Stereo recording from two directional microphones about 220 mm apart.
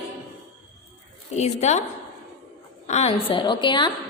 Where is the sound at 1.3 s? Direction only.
30° left (ahead or behind).